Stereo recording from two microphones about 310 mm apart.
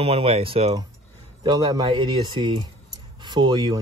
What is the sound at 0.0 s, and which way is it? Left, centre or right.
Speech, centre.